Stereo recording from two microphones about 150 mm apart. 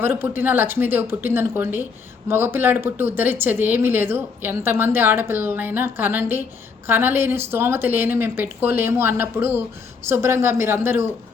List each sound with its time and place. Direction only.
0.0 s speech: 15° right (ahead or behind)